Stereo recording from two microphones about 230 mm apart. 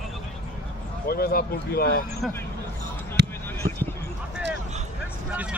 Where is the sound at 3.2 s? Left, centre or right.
Right.